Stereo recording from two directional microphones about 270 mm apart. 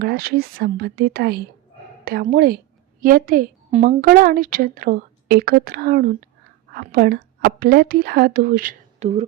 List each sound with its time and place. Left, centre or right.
0.0 s a woman's voice: right